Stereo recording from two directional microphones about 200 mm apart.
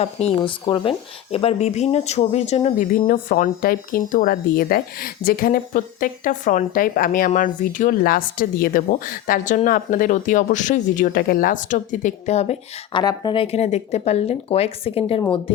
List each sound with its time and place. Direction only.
0.0 s speech: 30° left (ahead or behind)